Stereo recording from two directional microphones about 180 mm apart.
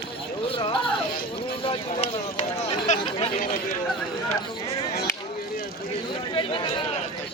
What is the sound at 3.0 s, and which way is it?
Chatter, 35° left (ahead or behind).